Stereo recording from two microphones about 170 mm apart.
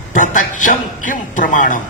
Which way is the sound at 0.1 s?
50° left (ahead or behind).